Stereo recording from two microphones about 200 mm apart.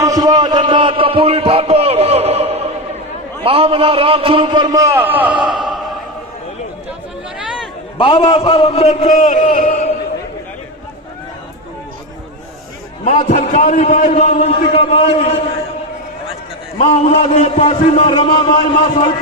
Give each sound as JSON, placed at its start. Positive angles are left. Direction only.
{"t": 0.0, "sound": "a sound", "side_deg": -20}
{"t": 3.4, "sound": "a man's voice", "side_deg": -25}
{"t": 7.3, "sound": "chatter", "side_deg": -5}
{"t": 7.9, "sound": "a man's voice", "side_deg": 25}
{"t": 13.1, "sound": "a man's voice", "side_deg": 35}
{"t": 16.7, "sound": "a man's voice", "side_deg": 35}